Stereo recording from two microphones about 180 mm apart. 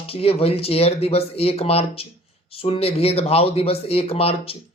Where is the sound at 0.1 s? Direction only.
30° left (ahead or behind).